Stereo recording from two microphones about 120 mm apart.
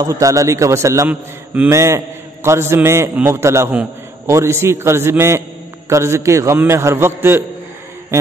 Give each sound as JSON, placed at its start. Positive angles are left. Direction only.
{"t": 0.0, "sound": "a man's voice", "side_deg": -30}